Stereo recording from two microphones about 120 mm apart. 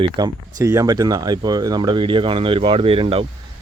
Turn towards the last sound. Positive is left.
turn(degrees=-50)  # may be behind; listen again after turning